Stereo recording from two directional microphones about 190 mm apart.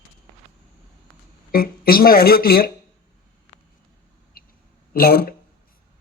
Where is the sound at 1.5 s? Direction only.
50° left (ahead or behind).